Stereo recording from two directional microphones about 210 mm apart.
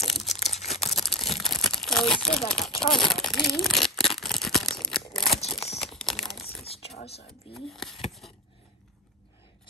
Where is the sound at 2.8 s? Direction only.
Centre (ahead or behind).